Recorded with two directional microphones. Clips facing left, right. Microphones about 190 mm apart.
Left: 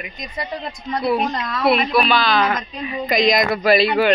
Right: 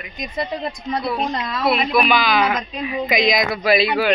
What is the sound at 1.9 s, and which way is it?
A woman's voice, 10° right (ahead or behind).